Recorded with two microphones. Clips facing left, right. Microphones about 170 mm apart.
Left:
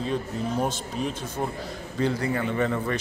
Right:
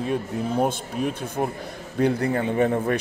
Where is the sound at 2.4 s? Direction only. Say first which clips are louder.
Right 4 dB; 15° right (ahead or behind).